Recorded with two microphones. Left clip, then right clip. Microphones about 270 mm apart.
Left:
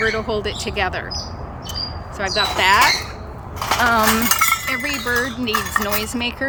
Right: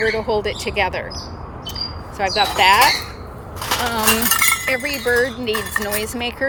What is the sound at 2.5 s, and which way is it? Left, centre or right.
Speech, centre.